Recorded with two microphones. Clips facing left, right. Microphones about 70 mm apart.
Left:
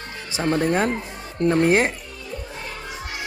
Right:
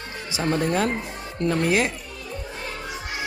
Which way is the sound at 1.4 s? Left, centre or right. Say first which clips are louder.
Left 4 dB; left.